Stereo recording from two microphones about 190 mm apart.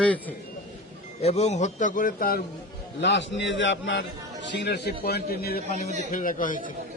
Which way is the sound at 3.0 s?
70° left (ahead or behind).